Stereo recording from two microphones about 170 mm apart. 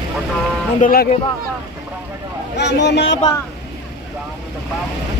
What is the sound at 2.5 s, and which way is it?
Speech, 90° left.